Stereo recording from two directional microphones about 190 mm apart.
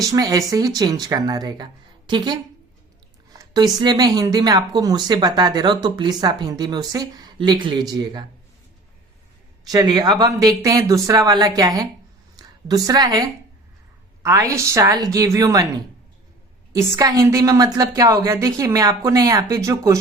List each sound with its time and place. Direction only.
0.1 s speech: 20° right (ahead or behind)
3.3 s a sound: 20° right (ahead or behind)
3.8 s speech: 20° right (ahead or behind)
9.6 s a woman's voice: 20° right (ahead or behind)
16.7 s a woman's voice: 20° right (ahead or behind)